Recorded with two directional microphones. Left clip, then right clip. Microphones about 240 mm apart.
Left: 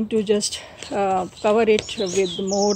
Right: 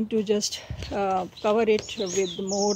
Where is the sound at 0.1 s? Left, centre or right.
Centre.